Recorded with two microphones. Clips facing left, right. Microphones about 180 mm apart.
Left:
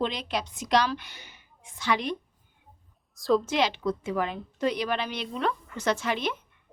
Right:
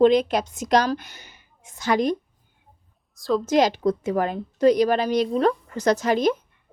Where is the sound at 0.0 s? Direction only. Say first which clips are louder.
Right 13 dB; 45° right (ahead or behind).